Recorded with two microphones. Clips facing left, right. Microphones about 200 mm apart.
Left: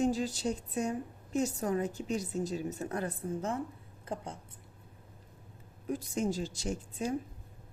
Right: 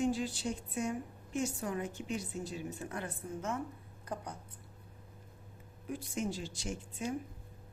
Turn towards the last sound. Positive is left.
turn(degrees=40)  # may be behind; listen again after turning